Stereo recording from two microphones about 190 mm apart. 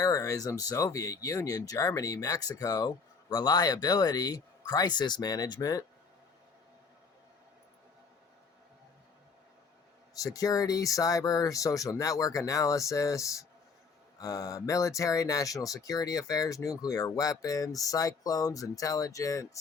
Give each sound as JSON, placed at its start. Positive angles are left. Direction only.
{"t": 0.0, "sound": "speech", "side_deg": 15}
{"t": 10.2, "sound": "speech", "side_deg": 20}